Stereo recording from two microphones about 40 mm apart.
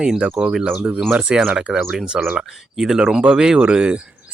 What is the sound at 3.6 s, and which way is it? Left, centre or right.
Speech, right.